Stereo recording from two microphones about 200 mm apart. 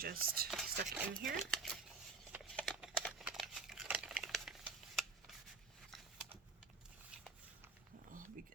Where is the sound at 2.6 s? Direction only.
Centre (ahead or behind).